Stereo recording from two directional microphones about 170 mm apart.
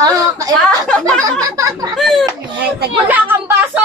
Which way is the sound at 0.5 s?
5° left (ahead or behind).